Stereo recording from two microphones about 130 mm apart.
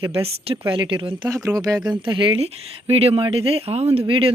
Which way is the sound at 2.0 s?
40° right (ahead or behind).